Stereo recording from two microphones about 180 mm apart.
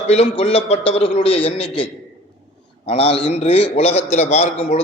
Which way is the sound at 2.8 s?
30° left (ahead or behind).